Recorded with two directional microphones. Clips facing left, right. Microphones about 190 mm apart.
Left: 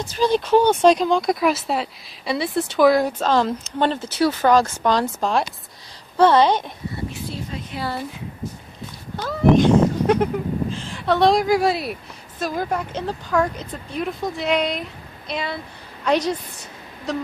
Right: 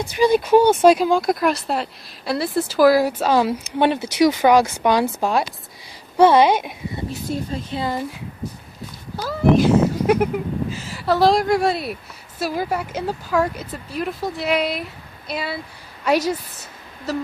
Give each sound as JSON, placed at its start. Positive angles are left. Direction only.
{"t": 0.0, "sound": "speech", "side_deg": -10}
{"t": 7.1, "sound": "speech", "side_deg": -35}
{"t": 9.1, "sound": "speech", "side_deg": -5}